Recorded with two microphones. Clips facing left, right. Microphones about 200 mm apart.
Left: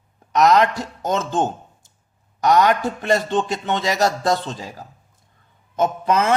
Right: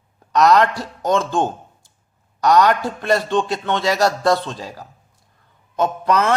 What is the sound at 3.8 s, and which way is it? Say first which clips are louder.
A man's voice: right 3 dB; 20° left (ahead or behind).